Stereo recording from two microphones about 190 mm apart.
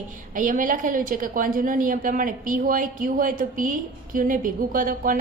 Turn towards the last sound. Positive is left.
turn(degrees=-45)  # may be behind; listen again after turning